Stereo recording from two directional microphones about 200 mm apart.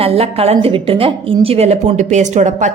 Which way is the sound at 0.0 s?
30° right (ahead or behind).